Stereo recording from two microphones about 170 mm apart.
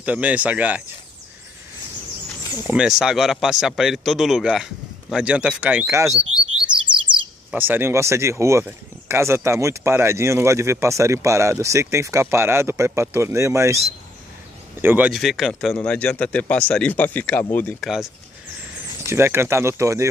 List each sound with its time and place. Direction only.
0.0 s speech: 10° right (ahead or behind)
2.6 s speech: 5° right (ahead or behind)
7.5 s speech: 10° right (ahead or behind)
14.8 s speech: 10° right (ahead or behind)
19.0 s speech: 15° right (ahead or behind)